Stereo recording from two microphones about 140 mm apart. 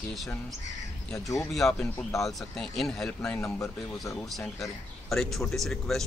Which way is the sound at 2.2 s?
Centre (ahead or behind).